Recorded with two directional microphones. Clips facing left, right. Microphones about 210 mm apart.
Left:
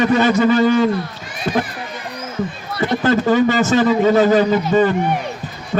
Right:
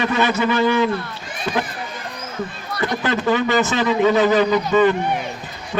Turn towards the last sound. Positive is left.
turn(degrees=45)  # may be behind; listen again after turning